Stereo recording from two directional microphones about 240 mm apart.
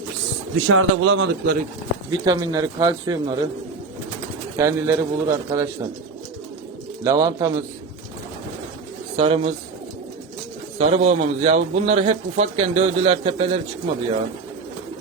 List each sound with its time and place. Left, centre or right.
0.5 s a man's voice: right
2.0 s speech: centre
4.5 s speech: centre
7.0 s speech: centre
9.1 s a man's voice: right
10.8 s a man's voice: right